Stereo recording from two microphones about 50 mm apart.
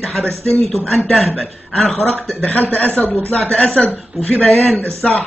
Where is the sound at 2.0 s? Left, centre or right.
Left.